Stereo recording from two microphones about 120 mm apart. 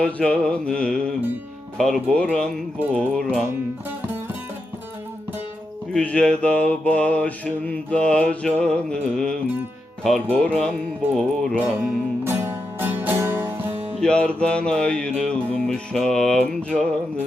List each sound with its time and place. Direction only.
0.0 s mantra: 10° left (ahead or behind)
3.1 s speech: 5° left (ahead or behind)
5.9 s mantra: 10° left (ahead or behind)
11.1 s speech: 5° left (ahead or behind)
11.5 s speech: 15° right (ahead or behind)
12.8 s music: 15° right (ahead or behind)
14.0 s mantra: 10° left (ahead or behind)